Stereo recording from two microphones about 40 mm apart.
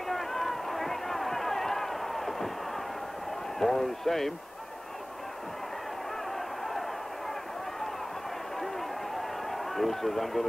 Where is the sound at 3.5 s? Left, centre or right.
Centre.